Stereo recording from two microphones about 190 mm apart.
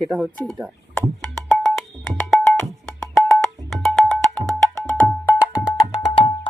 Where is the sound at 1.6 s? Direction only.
Centre (ahead or behind).